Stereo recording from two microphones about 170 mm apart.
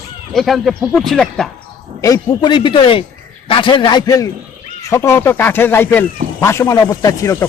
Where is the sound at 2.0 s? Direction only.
20° left (ahead or behind).